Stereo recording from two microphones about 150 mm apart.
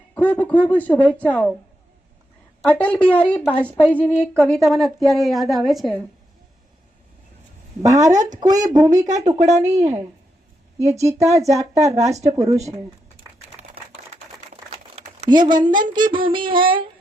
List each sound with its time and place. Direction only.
0.1 s speech: 10° left (ahead or behind)
2.6 s a woman's voice: 10° left (ahead or behind)
7.8 s a woman's voice: 20° right (ahead or behind)
9.0 s speech: 50° right (ahead or behind)
10.8 s a woman's voice: 20° right (ahead or behind)
14.5 s crumpling: 45° right (ahead or behind)
15.3 s a woman's voice: 30° right (ahead or behind)
15.9 s a sound: 30° right (ahead or behind)